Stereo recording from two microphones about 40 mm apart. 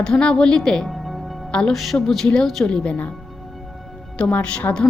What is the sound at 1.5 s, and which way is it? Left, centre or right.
Speech, centre.